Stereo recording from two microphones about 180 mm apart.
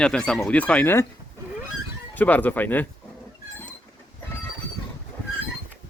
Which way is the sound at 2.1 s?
10° left (ahead or behind).